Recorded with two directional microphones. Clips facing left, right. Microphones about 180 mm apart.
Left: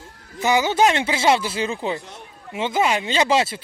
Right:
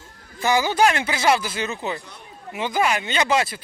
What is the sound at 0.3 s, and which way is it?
Speech, 20° left (ahead or behind).